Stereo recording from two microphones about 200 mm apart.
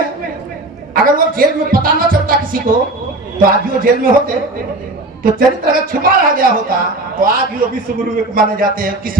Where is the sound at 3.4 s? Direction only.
45° right (ahead or behind).